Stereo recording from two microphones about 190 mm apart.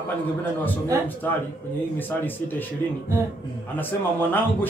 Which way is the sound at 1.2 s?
10° left (ahead or behind).